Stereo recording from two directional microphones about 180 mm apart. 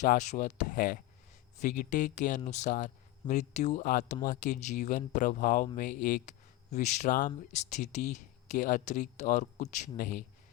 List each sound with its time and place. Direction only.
0.0 s speech: 40° left (ahead or behind)